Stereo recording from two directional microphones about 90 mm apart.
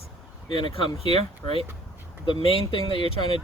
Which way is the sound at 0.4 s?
60° left (ahead or behind).